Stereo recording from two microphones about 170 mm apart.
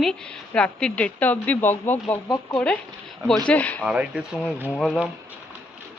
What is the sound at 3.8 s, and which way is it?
Speech, 5° right (ahead or behind).